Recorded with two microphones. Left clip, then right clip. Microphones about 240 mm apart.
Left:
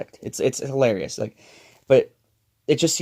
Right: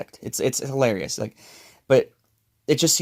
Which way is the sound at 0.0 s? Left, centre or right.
Right.